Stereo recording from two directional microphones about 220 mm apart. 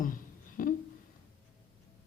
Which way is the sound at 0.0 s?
40° left (ahead or behind).